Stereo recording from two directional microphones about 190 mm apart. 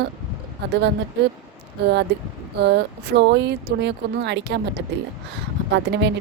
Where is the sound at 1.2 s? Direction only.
60° right (ahead or behind).